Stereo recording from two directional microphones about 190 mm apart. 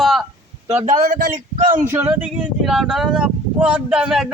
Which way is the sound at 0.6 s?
35° right (ahead or behind).